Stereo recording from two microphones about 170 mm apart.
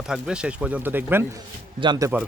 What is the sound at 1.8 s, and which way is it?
Speech, 20° right (ahead or behind).